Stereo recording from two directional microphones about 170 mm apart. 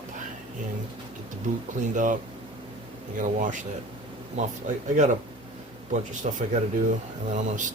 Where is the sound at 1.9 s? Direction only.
50° right (ahead or behind).